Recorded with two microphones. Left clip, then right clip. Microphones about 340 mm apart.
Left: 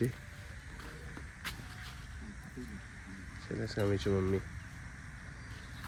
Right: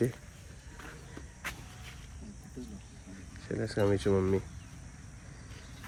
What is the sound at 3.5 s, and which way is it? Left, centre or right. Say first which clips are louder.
Speech: right 5 dB; right.